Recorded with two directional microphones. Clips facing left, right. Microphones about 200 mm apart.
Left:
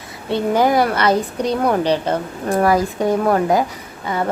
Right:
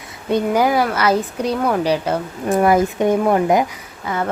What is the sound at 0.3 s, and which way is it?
Speech, 15° right (ahead or behind).